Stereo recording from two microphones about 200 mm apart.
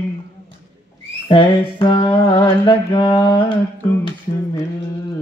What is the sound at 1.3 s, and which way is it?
Music, 25° left (ahead or behind).